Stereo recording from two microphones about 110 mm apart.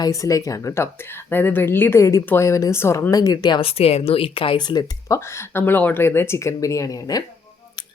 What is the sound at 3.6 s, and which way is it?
Speech, 65° left (ahead or behind).